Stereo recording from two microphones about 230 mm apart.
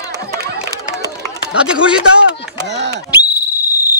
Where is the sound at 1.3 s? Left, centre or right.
Centre.